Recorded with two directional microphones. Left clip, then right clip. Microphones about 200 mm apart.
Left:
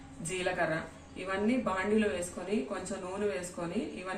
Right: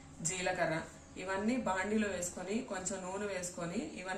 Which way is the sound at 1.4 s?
15° right (ahead or behind).